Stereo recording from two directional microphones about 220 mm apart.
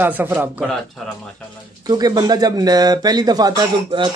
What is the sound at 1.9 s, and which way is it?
Speech, 20° right (ahead or behind).